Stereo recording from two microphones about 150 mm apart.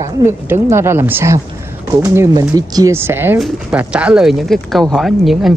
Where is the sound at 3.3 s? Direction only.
Centre (ahead or behind).